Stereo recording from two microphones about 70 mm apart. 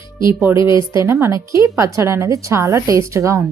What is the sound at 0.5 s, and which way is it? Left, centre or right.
A woman's voice, right.